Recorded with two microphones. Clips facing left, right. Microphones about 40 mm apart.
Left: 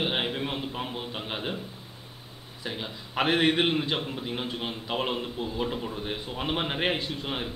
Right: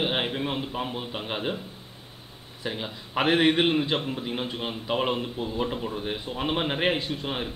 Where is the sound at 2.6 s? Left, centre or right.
Centre.